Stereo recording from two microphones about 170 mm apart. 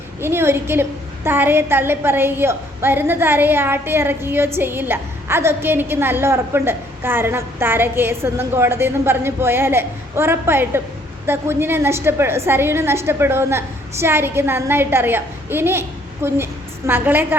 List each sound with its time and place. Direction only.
0.2 s a woman's voice: 15° right (ahead or behind)